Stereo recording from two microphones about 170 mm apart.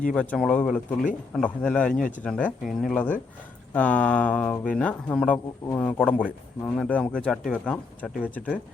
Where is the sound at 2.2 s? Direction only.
5° left (ahead or behind).